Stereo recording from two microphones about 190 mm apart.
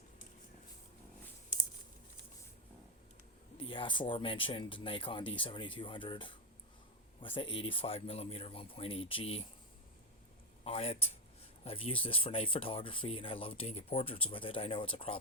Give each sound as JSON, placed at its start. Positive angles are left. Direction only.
{"t": 3.6, "sound": "speech", "side_deg": 25}
{"t": 10.6, "sound": "speech", "side_deg": 30}